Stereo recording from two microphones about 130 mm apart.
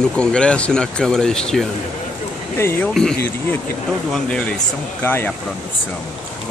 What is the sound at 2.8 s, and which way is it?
Speech, 5° left (ahead or behind).